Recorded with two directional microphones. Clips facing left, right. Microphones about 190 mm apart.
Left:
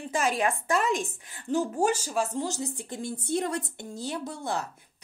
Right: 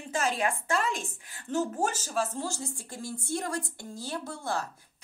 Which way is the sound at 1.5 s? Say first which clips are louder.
Left 4 dB; 15° left (ahead or behind).